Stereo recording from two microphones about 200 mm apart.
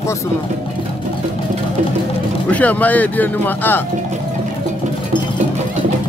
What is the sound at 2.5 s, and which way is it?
Speech, 5° left (ahead or behind).